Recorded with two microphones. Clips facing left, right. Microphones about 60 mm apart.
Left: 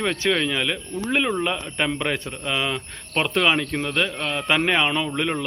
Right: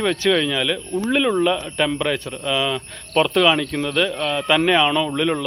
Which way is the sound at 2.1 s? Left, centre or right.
Centre.